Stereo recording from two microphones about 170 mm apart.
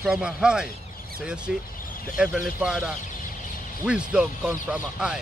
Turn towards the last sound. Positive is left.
turn(degrees=-5)  # may be behind; listen again after turning